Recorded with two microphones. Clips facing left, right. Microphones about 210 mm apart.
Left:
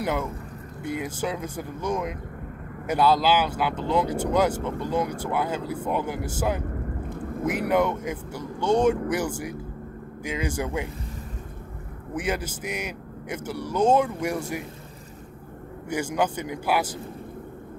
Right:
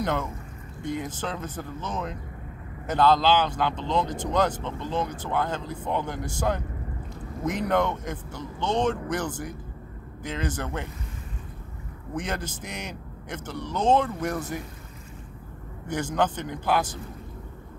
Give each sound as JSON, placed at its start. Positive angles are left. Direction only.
{"t": 0.0, "sound": "speech", "side_deg": 10}
{"t": 7.1, "sound": "a sound", "side_deg": 55}
{"t": 7.4, "sound": "speech", "side_deg": 10}
{"t": 12.1, "sound": "speech", "side_deg": 10}
{"t": 15.9, "sound": "speech", "side_deg": 10}